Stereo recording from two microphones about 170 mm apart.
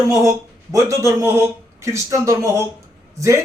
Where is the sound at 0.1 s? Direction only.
15° right (ahead or behind).